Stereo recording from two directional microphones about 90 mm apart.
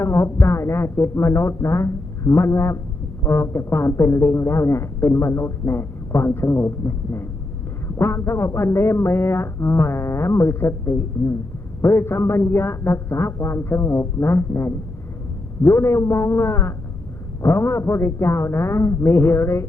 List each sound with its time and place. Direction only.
0.0 s a man's voice: 30° left (ahead or behind)